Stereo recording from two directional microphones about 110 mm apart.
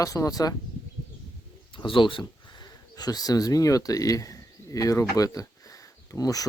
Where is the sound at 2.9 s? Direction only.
35° left (ahead or behind).